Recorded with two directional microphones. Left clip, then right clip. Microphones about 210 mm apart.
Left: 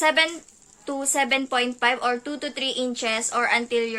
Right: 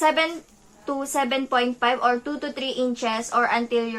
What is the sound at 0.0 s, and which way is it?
Speech, 20° left (ahead or behind).